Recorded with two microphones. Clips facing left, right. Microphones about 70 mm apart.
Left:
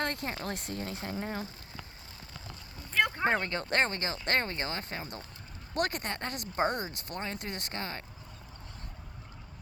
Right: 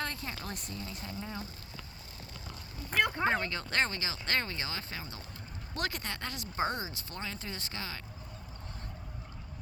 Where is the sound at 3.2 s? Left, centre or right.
Left.